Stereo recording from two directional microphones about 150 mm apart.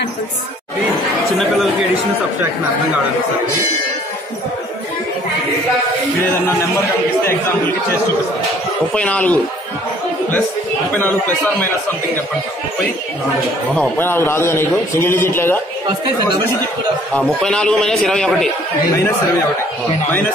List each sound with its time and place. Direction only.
8.9 s a man's voice: 10° left (ahead or behind)
11.0 s a man's voice: 10° left (ahead or behind)
13.7 s a man's voice: 15° left (ahead or behind)
17.1 s a man's voice: 5° left (ahead or behind)